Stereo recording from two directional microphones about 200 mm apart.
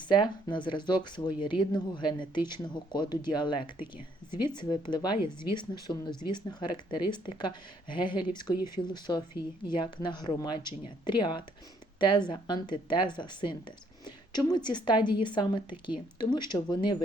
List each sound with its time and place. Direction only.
0.1 s a woman's voice: 25° left (ahead or behind)